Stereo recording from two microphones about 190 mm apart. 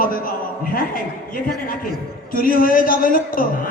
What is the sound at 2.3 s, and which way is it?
A man's voice, 50° left (ahead or behind).